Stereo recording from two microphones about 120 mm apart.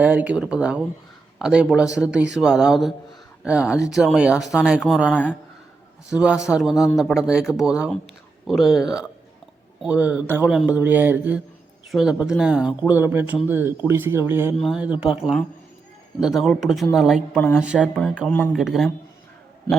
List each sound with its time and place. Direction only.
0.0 s speech: 15° right (ahead or behind)
5.0 s speech: 15° left (ahead or behind)
6.1 s speech: 5° right (ahead or behind)
14.5 s speech: centre (ahead or behind)
16.2 s speech: centre (ahead or behind)
17.3 s speech: 15° left (ahead or behind)
17.6 s speech: 10° right (ahead or behind)
18.3 s speech: 10° left (ahead or behind)
18.5 s speech: 5° right (ahead or behind)